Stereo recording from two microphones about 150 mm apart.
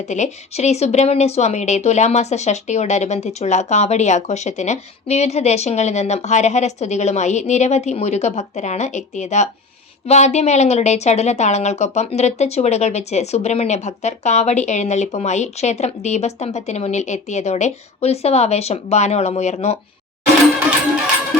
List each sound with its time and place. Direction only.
0.0 s a woman's voice: 50° left (ahead or behind)